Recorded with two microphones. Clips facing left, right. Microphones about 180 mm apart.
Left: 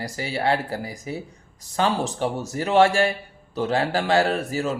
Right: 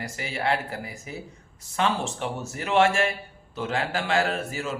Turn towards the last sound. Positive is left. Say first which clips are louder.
# left 5 dB
turn(degrees=35)  # may be behind; listen again after turning